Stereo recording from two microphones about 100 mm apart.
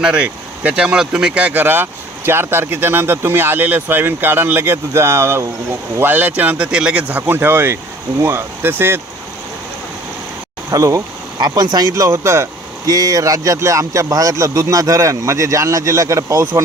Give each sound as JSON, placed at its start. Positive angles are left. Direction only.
{"t": 0.0, "sound": "speech", "side_deg": -10}
{"t": 10.7, "sound": "speech", "side_deg": -35}
{"t": 12.0, "sound": "speech", "side_deg": -30}
{"t": 12.9, "sound": "a man's voice", "side_deg": -40}